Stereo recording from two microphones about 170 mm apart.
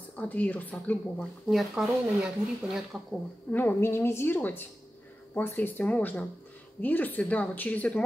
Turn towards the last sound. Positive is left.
turn(degrees=10)  # may be behind; listen again after turning